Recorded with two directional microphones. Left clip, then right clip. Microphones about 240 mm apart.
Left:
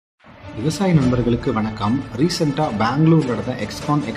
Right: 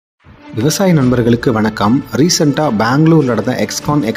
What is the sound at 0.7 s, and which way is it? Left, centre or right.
Speech, right.